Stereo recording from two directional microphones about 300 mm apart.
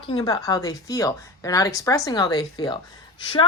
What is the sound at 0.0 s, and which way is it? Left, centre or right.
A woman's voice, centre.